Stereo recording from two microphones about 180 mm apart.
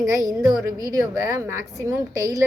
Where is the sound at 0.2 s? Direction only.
20° right (ahead or behind).